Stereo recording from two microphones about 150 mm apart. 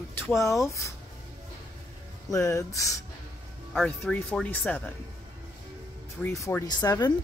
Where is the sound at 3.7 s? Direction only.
5° left (ahead or behind).